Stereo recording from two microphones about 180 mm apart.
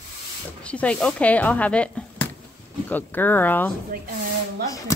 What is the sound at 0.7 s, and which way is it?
Speech, 5° left (ahead or behind).